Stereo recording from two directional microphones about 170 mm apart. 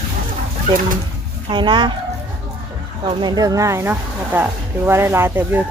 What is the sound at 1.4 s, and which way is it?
Speech, 25° right (ahead or behind).